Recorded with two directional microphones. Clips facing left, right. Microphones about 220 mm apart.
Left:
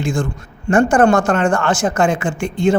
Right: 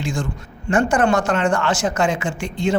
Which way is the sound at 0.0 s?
50° left (ahead or behind).